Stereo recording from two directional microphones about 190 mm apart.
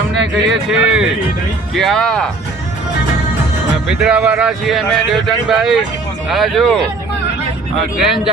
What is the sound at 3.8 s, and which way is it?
Speech, 5° right (ahead or behind).